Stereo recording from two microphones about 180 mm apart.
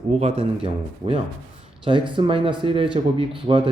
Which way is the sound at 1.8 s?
25° right (ahead or behind).